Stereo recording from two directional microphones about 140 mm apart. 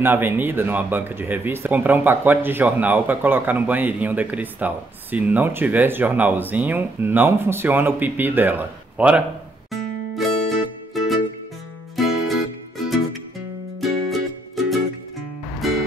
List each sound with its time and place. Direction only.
0.0 s speech: 15° right (ahead or behind)
9.7 s music: centre (ahead or behind)
15.6 s music: centre (ahead or behind)